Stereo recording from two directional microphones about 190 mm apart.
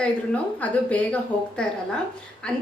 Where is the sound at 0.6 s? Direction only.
5° left (ahead or behind).